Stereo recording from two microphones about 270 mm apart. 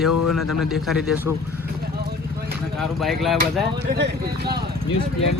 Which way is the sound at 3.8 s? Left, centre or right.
Right.